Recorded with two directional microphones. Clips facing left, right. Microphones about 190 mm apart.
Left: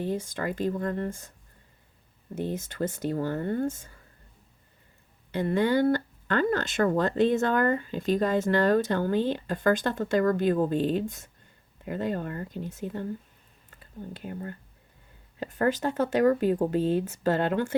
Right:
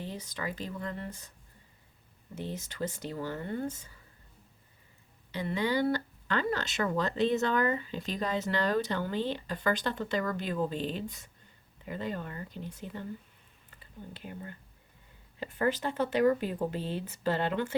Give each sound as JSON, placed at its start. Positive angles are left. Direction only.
{"t": 0.0, "sound": "speech", "side_deg": 50}
{"t": 2.3, "sound": "speech", "side_deg": 50}
{"t": 5.3, "sound": "speech", "side_deg": 50}